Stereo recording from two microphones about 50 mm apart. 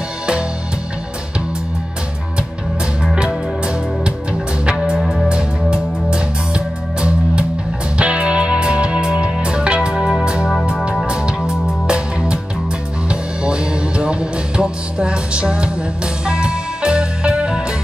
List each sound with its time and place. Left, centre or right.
3.2 s music: centre
5.0 s music: centre
5.3 s music: centre